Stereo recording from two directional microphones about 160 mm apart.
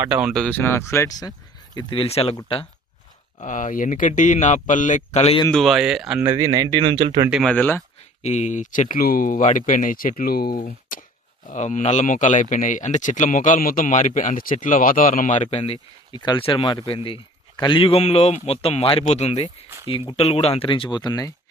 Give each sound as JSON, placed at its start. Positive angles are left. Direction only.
{"t": 0.0, "sound": "speech", "side_deg": -5}
{"t": 1.7, "sound": "speech", "side_deg": 35}
{"t": 3.4, "sound": "speech", "side_deg": 55}
{"t": 5.5, "sound": "speech", "side_deg": 0}
{"t": 6.2, "sound": "speech", "side_deg": -25}
{"t": 7.3, "sound": "speech", "side_deg": -5}
{"t": 7.5, "sound": "speech", "side_deg": 10}
{"t": 8.2, "sound": "speech", "side_deg": 45}